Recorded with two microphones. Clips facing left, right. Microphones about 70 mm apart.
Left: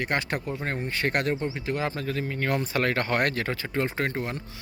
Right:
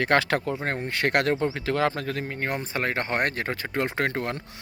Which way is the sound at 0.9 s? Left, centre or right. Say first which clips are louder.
Right 3 dB; right.